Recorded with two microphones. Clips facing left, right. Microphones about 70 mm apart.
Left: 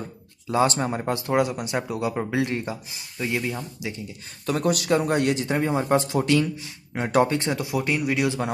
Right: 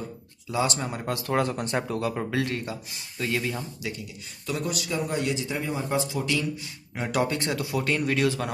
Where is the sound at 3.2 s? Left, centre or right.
Centre.